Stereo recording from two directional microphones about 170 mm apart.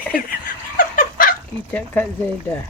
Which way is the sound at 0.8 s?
55° left (ahead or behind).